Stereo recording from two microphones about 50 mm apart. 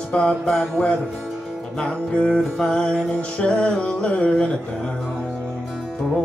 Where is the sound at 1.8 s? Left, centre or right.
Left.